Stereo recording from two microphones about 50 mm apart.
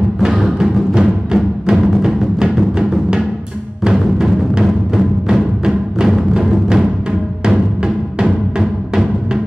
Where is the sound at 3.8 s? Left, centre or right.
Centre.